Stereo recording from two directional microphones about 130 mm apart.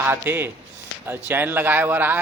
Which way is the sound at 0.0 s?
20° right (ahead or behind).